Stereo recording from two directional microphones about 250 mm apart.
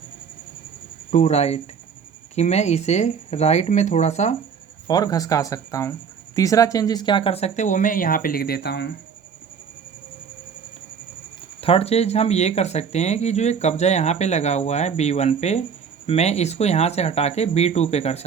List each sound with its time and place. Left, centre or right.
1.1 s speech: left
4.9 s speech: centre; by 8.9 s left
11.6 s speech: left